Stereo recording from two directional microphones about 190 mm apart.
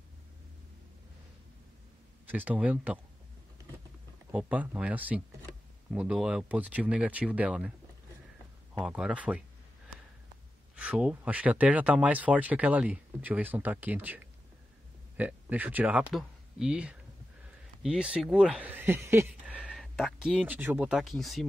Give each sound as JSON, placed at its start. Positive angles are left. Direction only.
{"t": 2.2, "sound": "speech", "side_deg": -10}
{"t": 4.3, "sound": "speech", "side_deg": -5}
{"t": 8.7, "sound": "speech", "side_deg": -5}
{"t": 10.8, "sound": "speech", "side_deg": -5}